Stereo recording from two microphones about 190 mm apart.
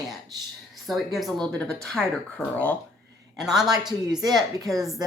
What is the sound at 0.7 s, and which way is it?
A woman's voice, centre (ahead or behind).